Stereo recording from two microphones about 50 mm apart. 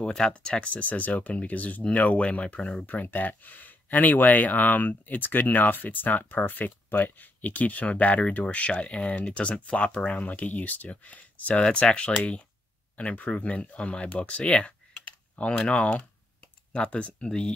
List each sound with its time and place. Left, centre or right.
0.3 s speech: left
2.9 s speech: left
14.0 s computer keyboard: left
15.6 s speech: left